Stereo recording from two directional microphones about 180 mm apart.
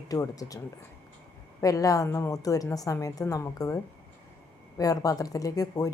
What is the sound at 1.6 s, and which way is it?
Speech, 20° left (ahead or behind).